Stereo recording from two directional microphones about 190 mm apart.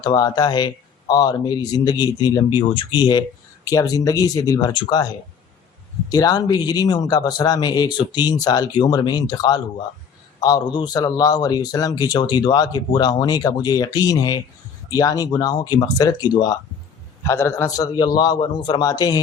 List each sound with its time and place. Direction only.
0.0 s speech: 20° left (ahead or behind)
6.1 s speech: 20° left (ahead or behind)